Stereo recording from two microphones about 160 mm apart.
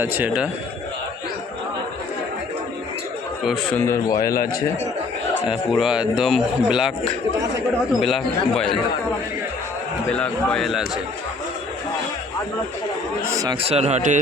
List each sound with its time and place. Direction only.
0.0 s speech: 10° right (ahead or behind)
3.4 s speech: centre (ahead or behind)
3.8 s a man's voice: 15° left (ahead or behind)
5.5 s speech: 5° right (ahead or behind)
8.0 s speech: centre (ahead or behind)
10.1 s speech: 5° left (ahead or behind)
13.3 s speech: 20° right (ahead or behind)
13.6 s speech: 40° right (ahead or behind)